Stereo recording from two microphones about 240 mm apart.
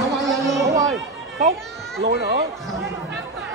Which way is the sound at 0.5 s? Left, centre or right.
Centre.